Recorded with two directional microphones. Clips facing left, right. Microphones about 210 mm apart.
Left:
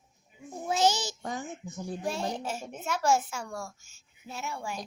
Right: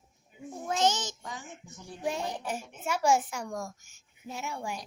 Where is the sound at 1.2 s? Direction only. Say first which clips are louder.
Left 7 dB; 45° left (ahead or behind).